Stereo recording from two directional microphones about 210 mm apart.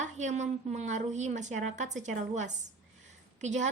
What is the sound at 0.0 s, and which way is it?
A woman's voice, 35° right (ahead or behind).